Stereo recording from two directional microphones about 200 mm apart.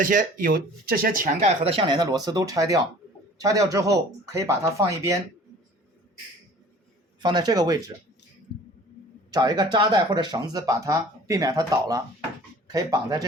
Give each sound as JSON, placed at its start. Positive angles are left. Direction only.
{"t": 0.0, "sound": "speech", "side_deg": -45}
{"t": 7.2, "sound": "speech", "side_deg": -20}
{"t": 9.3, "sound": "speech", "side_deg": -20}